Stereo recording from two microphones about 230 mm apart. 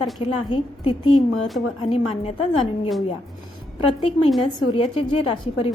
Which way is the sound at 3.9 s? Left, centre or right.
Left.